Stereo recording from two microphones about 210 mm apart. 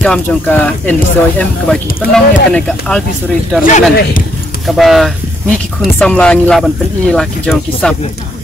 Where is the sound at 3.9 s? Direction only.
50° left (ahead or behind).